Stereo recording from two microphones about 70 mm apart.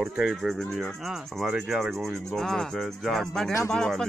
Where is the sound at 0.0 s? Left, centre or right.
Centre.